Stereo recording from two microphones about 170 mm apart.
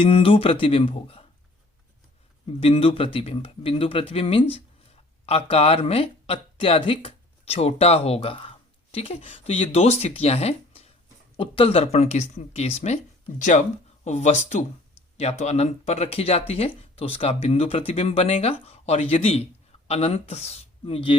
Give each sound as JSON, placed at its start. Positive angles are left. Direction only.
{"t": 0.0, "sound": "speech", "side_deg": 35}
{"t": 2.6, "sound": "speech", "side_deg": 35}